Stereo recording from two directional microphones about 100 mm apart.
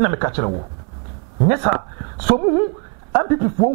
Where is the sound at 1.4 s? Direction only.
25° right (ahead or behind).